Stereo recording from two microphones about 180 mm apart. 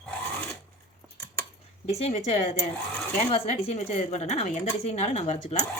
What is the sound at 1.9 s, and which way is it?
Speech, 35° left (ahead or behind).